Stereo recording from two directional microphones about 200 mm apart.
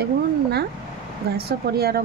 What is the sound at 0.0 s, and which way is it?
Speech, 55° right (ahead or behind).